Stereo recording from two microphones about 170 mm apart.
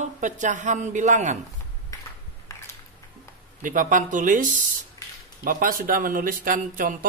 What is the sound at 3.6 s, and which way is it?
A man's voice, 50° right (ahead or behind).